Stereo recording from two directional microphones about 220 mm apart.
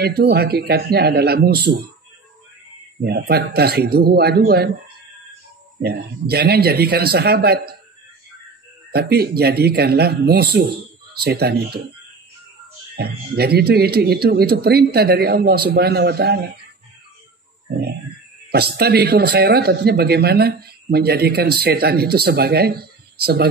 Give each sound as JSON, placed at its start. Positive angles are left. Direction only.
{"t": 0.0, "sound": "speech", "side_deg": -45}
{"t": 3.0, "sound": "speech", "side_deg": -45}
{"t": 5.8, "sound": "speech", "side_deg": -45}
{"t": 8.9, "sound": "speech", "side_deg": -45}
{"t": 12.9, "sound": "speech", "side_deg": -45}
{"t": 18.5, "sound": "speech", "side_deg": -45}